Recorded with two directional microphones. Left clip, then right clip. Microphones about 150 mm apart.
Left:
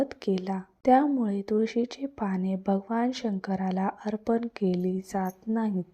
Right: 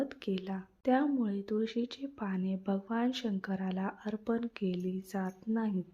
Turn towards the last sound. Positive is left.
turn(degrees=30)  # may be behind; listen again after turning